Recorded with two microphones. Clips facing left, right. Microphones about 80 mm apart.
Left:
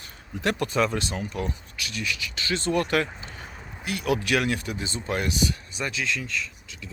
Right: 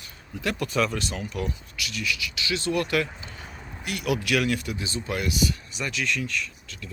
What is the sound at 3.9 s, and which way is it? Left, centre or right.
Speech, left.